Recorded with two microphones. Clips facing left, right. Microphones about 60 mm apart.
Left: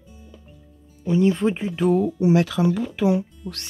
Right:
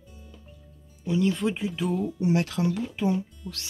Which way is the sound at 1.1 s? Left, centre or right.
Left.